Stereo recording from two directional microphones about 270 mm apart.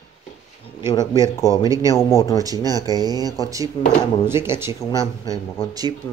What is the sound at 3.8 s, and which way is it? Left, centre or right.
Speech, centre.